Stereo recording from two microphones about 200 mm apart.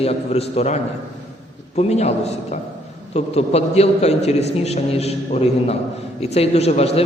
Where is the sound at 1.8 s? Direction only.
30° left (ahead or behind).